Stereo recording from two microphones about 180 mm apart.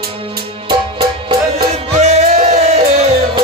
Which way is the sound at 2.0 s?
40° right (ahead or behind).